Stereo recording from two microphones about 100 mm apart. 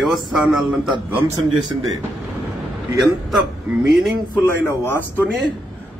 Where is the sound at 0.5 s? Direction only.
5° right (ahead or behind).